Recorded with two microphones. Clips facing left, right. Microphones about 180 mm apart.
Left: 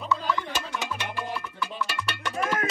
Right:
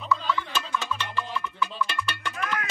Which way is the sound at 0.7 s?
15° left (ahead or behind).